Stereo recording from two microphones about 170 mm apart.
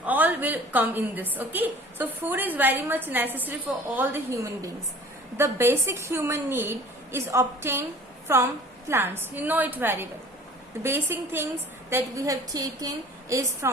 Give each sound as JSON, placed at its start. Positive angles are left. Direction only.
{"t": 0.0, "sound": "a woman's voice", "side_deg": -10}